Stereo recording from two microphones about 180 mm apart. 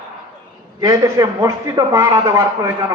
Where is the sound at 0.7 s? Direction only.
20° right (ahead or behind).